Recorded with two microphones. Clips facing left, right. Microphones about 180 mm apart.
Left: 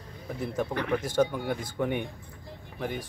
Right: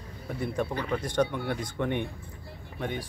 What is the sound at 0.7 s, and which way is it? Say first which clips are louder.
Speech: left 2 dB; 65° left (ahead or behind).